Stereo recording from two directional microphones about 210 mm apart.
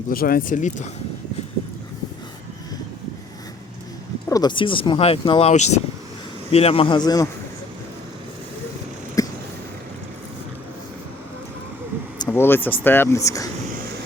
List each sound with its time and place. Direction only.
0.1 s speech: 45° left (ahead or behind)
4.3 s speech: 20° left (ahead or behind)
9.2 s a sound: 15° left (ahead or behind)
12.2 s speech: 10° left (ahead or behind)